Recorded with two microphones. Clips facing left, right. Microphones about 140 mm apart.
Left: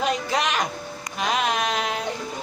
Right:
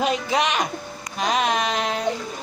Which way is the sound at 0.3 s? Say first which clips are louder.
Right 2 dB; centre (ahead or behind).